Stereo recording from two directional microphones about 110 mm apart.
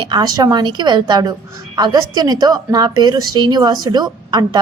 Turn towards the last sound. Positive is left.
turn(degrees=-40)  # may be behind; listen again after turning